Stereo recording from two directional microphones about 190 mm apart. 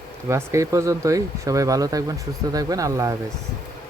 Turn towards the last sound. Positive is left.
turn(degrees=-15)  # may be behind; listen again after turning